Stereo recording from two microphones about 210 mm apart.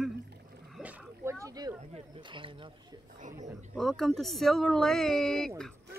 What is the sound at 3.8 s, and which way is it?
Speech, centre (ahead or behind).